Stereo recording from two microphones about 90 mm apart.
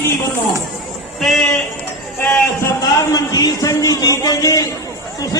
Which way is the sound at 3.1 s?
40° left (ahead or behind).